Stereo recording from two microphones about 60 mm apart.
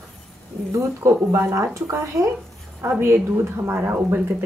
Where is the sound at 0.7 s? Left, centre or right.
Right.